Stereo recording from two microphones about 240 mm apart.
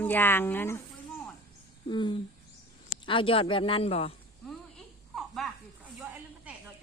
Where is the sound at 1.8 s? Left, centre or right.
Centre.